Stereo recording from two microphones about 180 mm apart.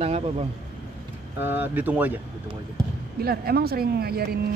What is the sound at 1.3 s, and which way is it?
Speech, 10° right (ahead or behind).